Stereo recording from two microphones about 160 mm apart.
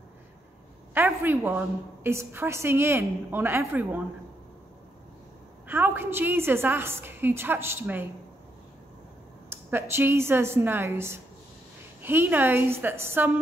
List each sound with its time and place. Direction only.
0.9 s a woman's voice: 15° right (ahead or behind)
5.7 s a woman's voice: 15° right (ahead or behind)
9.5 s a woman's voice: 15° right (ahead or behind)